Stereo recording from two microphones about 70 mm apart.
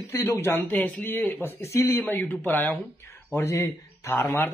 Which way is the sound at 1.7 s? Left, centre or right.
Left.